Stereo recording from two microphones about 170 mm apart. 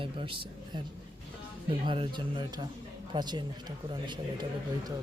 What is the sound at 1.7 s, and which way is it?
Speech, 30° right (ahead or behind).